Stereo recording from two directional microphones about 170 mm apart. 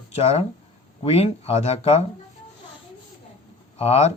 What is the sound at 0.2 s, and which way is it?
Speech, 40° left (ahead or behind).